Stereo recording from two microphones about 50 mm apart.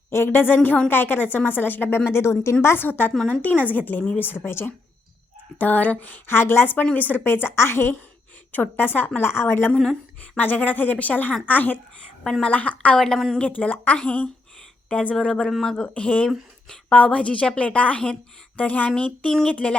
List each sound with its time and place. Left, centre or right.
0.3 s a woman's voice: left
2.0 s a woman's voice: left
2.8 s speech: left
4.2 s a woman's voice: left
5.5 s speech: left
6.2 s a woman's voice: left
6.9 s a woman's voice: left
8.5 s speech: left
9.2 s a woman's voice: left
10.3 s a woman's voice: left
13.0 s a woman's voice: centre
13.7 s a woman's voice: left; by 17.7 s centre
17.7 s a woman's voice: left
18.9 s a woman's voice: centre